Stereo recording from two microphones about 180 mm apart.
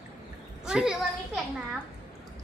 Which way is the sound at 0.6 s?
5° right (ahead or behind).